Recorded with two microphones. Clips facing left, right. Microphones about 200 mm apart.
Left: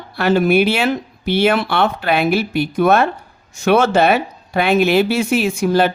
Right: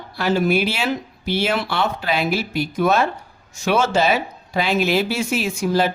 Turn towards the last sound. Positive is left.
turn(degrees=60)  # may be behind; listen again after turning